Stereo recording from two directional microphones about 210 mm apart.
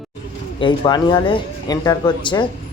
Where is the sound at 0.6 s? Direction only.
20° left (ahead or behind).